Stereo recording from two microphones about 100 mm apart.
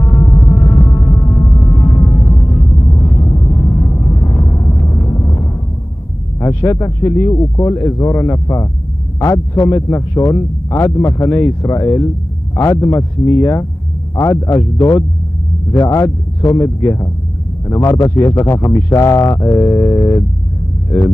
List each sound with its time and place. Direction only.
0.2 s music: 50° left (ahead or behind)
0.6 s a sound: 35° left (ahead or behind)
6.4 s a man's voice: 30° left (ahead or behind)